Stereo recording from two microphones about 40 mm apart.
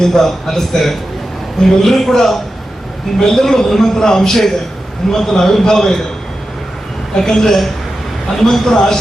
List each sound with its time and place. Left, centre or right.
0.0 s a man's voice: centre
7.2 s a man's voice: centre